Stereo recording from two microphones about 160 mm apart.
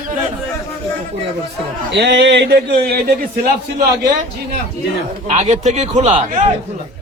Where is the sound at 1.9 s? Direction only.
90° right.